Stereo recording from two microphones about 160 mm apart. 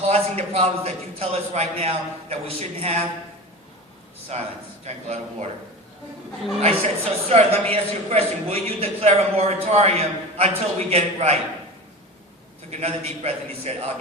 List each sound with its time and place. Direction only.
0.1 s a man's voice: 40° right (ahead or behind)
4.3 s a man's voice: 45° right (ahead or behind)
6.6 s a man's voice: 40° right (ahead or behind)
12.7 s a man's voice: 40° right (ahead or behind)